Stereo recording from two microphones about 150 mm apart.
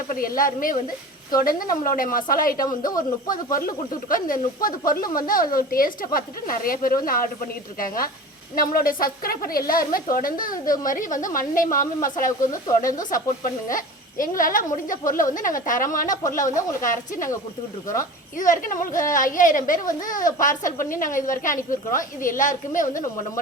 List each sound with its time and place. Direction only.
0.1 s a woman's voice: 70° left (ahead or behind)